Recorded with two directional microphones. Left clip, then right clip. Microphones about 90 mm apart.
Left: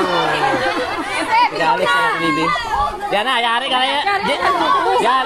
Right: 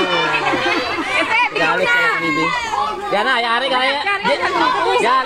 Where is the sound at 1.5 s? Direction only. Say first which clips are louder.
Even; 30° left (ahead or behind).